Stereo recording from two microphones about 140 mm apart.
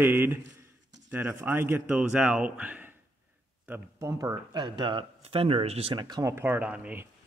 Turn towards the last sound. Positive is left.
turn(degrees=-10)  # may be behind; listen again after turning